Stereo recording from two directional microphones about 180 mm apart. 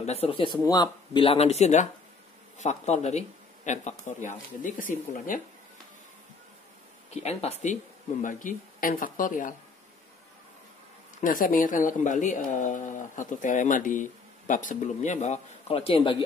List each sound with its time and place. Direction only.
0.0 s speech: 35° left (ahead or behind)
7.2 s speech: 35° left (ahead or behind)
11.1 s speech: 50° left (ahead or behind); by 16.3 s 30° left (ahead or behind)